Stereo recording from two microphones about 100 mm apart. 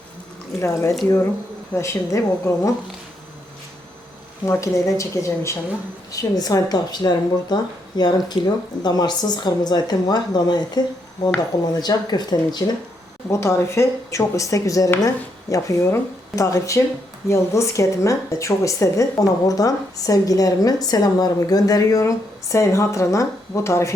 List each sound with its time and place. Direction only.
0.6 s speech: 30° left (ahead or behind)
4.4 s speech: 30° left (ahead or behind)
13.3 s speech: 30° left (ahead or behind)